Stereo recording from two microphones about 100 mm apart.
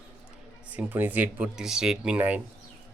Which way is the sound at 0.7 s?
20° right (ahead or behind).